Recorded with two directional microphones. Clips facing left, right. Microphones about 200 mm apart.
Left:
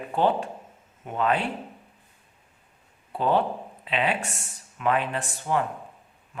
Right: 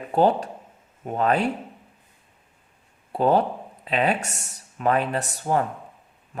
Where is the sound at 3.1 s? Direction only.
40° right (ahead or behind).